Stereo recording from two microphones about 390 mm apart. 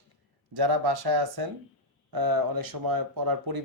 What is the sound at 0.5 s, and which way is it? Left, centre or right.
A man's voice, right.